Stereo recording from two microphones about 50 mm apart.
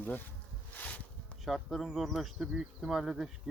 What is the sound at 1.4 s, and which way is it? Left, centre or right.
Speech, centre.